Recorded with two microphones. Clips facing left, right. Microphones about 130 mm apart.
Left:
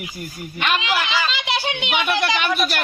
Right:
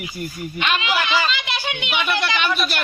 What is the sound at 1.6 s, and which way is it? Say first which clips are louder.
Speech: left 2 dB; 30° left (ahead or behind).